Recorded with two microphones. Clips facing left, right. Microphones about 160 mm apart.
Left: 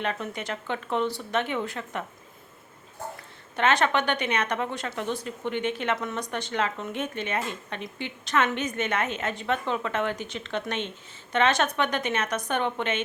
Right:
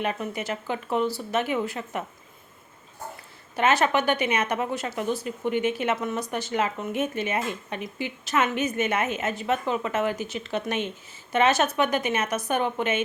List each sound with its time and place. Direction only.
0.0 s speech: 5° right (ahead or behind)
3.5 s speech: 5° right (ahead or behind)